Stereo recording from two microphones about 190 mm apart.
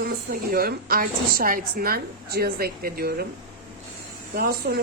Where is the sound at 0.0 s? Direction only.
50° right (ahead or behind).